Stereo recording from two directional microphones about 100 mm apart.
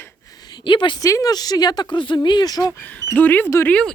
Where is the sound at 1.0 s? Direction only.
35° left (ahead or behind).